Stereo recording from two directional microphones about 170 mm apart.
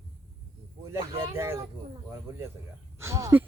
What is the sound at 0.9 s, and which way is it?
Speech, 15° right (ahead or behind).